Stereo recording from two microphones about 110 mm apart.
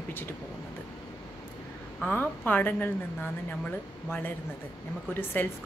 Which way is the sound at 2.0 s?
15° left (ahead or behind).